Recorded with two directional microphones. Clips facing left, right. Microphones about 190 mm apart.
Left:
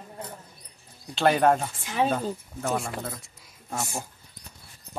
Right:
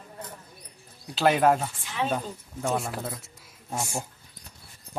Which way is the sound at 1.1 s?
5° right (ahead or behind).